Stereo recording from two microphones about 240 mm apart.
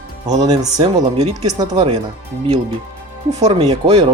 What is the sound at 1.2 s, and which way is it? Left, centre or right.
Speech, right.